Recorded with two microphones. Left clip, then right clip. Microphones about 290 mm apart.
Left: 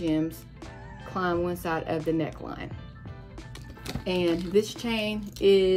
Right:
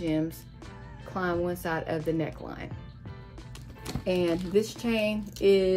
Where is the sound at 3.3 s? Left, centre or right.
Centre.